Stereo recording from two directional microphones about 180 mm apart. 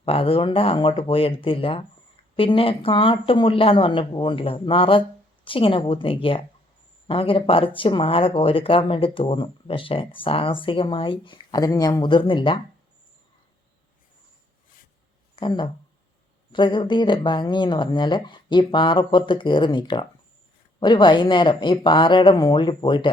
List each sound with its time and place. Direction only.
0.0 s speech: 30° left (ahead or behind)
15.4 s speech: 25° left (ahead or behind)